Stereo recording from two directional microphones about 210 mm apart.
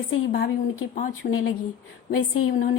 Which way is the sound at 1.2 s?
45° left (ahead or behind).